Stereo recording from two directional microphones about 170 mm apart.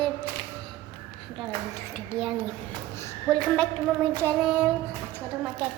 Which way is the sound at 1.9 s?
Centre (ahead or behind).